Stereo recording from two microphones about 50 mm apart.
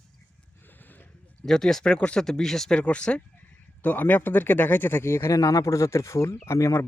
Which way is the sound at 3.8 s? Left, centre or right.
Left.